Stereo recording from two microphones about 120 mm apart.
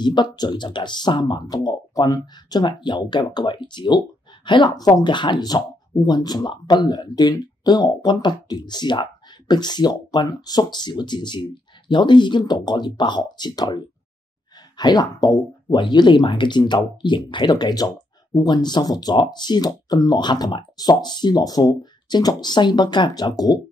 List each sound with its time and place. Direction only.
0.0 s speech: 40° left (ahead or behind)